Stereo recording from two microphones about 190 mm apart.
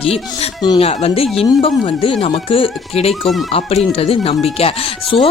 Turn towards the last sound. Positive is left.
turn(degrees=30)  # may be behind; listen again after turning